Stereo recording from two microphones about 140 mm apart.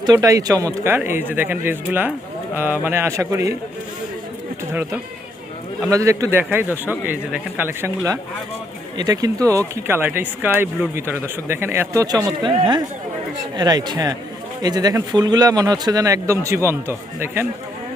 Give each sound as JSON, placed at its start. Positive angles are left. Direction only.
{"t": 0.0, "sound": "speech", "side_deg": -25}
{"t": 4.7, "sound": "speech", "side_deg": -15}
{"t": 12.0, "sound": "speech", "side_deg": -30}